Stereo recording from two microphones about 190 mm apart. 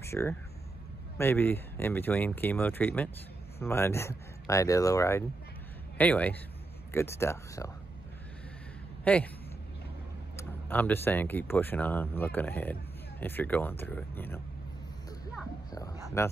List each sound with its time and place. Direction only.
0.0 s speech: 15° left (ahead or behind)
9.0 s speech: 10° left (ahead or behind)
10.3 s speech: 10° left (ahead or behind)
15.7 s a sound: 20° left (ahead or behind)